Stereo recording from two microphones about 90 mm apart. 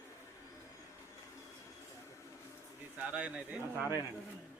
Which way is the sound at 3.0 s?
10° right (ahead or behind).